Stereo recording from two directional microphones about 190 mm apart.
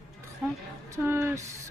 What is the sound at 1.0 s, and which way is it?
Speech, 15° right (ahead or behind).